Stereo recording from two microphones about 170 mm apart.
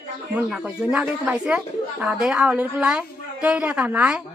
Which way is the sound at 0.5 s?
5° right (ahead or behind).